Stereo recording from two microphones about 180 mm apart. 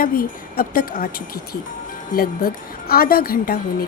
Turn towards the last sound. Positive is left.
turn(degrees=55)  # may be behind; listen again after turning